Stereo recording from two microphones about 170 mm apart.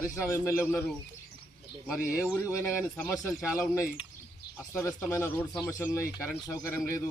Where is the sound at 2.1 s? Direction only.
15° left (ahead or behind).